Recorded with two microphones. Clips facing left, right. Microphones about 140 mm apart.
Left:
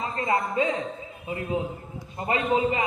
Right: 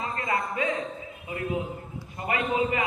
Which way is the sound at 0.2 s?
25° left (ahead or behind).